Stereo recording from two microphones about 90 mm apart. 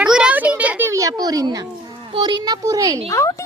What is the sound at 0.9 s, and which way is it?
Speech, 40° right (ahead or behind).